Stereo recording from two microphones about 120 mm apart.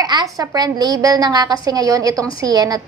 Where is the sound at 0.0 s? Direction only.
35° right (ahead or behind).